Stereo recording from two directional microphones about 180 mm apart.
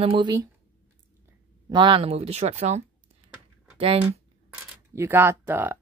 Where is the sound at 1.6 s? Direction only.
25° right (ahead or behind).